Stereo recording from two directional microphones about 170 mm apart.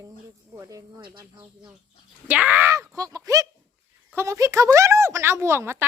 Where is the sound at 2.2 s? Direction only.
10° right (ahead or behind).